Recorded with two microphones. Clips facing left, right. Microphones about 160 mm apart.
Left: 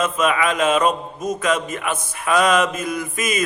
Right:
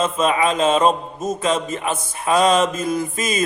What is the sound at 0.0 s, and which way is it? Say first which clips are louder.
A man's voice: right 1 dB; 30° right (ahead or behind).